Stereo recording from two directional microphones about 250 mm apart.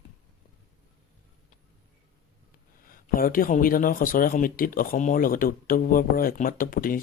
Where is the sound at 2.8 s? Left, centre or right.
Left.